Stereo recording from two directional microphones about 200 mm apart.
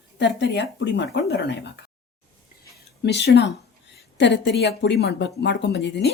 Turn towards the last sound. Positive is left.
turn(degrees=55)  # may be behind; listen again after turning